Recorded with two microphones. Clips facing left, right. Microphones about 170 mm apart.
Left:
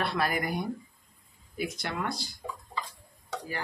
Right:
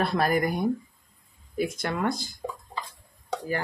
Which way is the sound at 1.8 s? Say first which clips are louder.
Right 6 dB; 50° right (ahead or behind).